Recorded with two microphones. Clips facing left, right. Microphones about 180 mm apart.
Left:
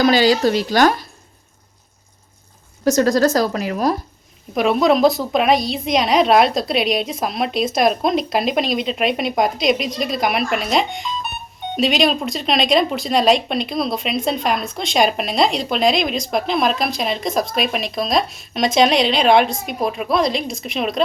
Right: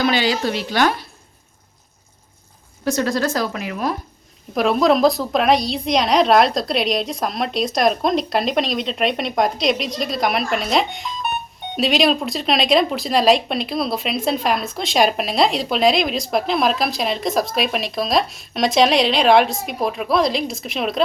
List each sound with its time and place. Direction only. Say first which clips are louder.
0.0 s speech: left 5 dB; 40° left (ahead or behind)
2.8 s speech: left 5 dB; 40° left (ahead or behind)
4.5 s speech: left 1 dB; centre (ahead or behind)